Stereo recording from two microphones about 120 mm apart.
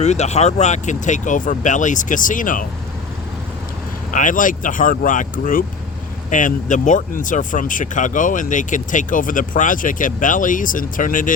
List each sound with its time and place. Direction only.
0.0 s speech: 70° left (ahead or behind); by 2.6 s 90° left
4.1 s speech: 90° left
6.3 s speech: 90° left